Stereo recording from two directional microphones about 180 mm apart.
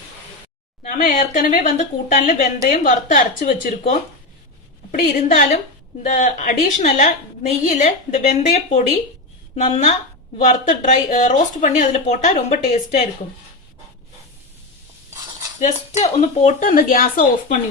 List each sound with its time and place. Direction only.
0.8 s a woman's voice: 45° left (ahead or behind)
15.6 s speech: 40° left (ahead or behind)